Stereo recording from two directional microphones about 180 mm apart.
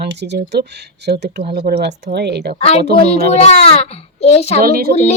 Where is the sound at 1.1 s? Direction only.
55° right (ahead or behind).